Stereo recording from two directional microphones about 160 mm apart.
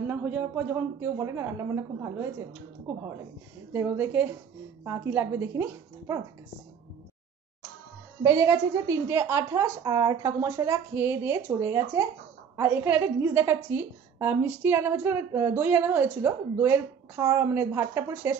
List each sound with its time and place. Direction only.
0.0 s a woman's voice: 10° right (ahead or behind)
3.7 s a woman's voice: 10° right (ahead or behind)
8.2 s a woman's voice: 20° right (ahead or behind)